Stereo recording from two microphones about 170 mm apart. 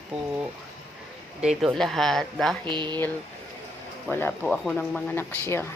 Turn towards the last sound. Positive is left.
turn(degrees=15)  # may be behind; listen again after turning